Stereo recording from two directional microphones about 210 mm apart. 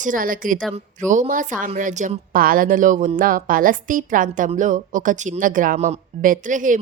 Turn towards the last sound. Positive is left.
turn(degrees=-40)  # may be behind; listen again after turning